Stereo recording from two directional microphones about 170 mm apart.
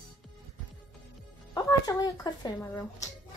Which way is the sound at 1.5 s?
20° left (ahead or behind).